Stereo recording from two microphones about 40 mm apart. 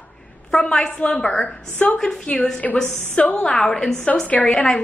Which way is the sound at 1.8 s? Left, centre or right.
Left.